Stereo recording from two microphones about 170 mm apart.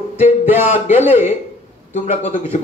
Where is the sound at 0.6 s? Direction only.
40° left (ahead or behind).